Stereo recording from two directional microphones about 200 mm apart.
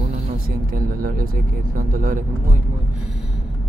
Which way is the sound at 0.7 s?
45° right (ahead or behind).